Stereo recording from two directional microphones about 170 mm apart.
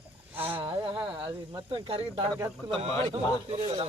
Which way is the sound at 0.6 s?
30° right (ahead or behind).